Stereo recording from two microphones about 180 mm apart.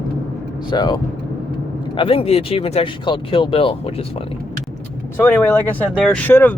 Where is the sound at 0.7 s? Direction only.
25° left (ahead or behind).